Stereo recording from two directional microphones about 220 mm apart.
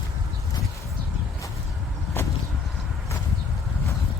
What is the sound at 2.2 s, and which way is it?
Vehicle, 10° left (ahead or behind).